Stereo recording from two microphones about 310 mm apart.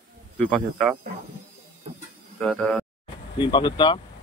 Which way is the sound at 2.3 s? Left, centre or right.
Centre.